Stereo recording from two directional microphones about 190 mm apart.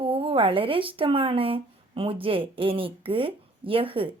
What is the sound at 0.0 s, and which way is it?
Speech, 30° right (ahead or behind).